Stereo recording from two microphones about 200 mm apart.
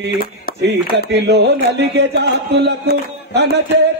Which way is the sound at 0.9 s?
60° right (ahead or behind).